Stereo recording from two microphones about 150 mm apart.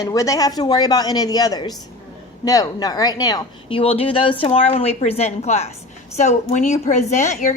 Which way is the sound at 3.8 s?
40° left (ahead or behind).